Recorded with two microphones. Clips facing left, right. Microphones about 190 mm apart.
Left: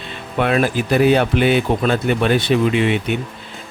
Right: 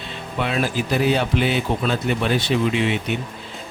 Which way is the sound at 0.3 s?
55° left (ahead or behind).